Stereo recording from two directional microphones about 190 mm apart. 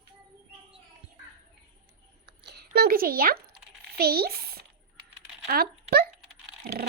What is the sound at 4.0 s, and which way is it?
A child's voice, 55° right (ahead or behind).